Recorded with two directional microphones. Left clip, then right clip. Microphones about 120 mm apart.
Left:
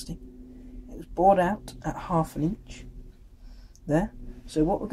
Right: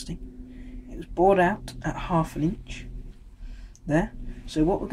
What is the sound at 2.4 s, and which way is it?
Speech, 45° left (ahead or behind).